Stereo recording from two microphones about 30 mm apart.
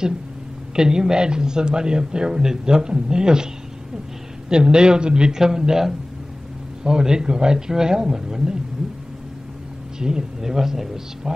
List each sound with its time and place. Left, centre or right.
0.7 s speech: right
4.5 s speech: right
5.3 s speech: centre
9.9 s a man's voice: right